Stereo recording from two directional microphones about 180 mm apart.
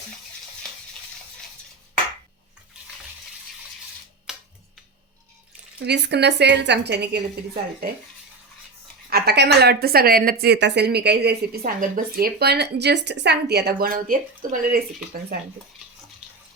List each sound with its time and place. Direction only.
4.3 s a sound: 5° right (ahead or behind)
5.8 s a woman's voice: 70° right (ahead or behind)
9.0 s a woman's voice: 60° right (ahead or behind)